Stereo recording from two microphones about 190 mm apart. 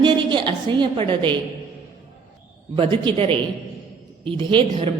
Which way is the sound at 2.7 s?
25° right (ahead or behind).